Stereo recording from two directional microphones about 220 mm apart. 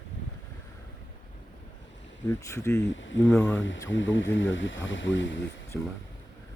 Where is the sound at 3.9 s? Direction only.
60° left (ahead or behind).